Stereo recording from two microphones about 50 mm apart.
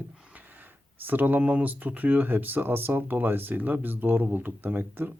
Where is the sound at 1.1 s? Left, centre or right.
Right.